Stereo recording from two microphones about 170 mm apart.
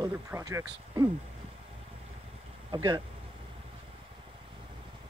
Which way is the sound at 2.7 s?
25° right (ahead or behind).